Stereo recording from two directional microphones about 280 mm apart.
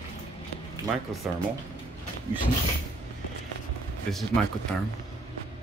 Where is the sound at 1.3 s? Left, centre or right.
Centre.